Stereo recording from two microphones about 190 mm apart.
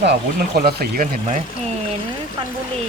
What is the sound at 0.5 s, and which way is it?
Speech, 55° right (ahead or behind).